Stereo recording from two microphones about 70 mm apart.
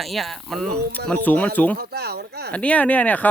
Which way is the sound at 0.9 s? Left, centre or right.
Left.